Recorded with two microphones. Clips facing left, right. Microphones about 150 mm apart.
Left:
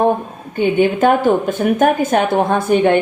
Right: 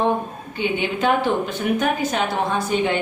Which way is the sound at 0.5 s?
50° left (ahead or behind).